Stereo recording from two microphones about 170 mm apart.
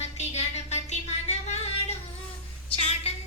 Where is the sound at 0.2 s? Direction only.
40° left (ahead or behind).